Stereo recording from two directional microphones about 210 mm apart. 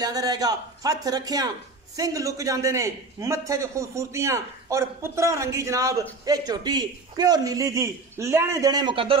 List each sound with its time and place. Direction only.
0.0 s a man's voice: 15° right (ahead or behind)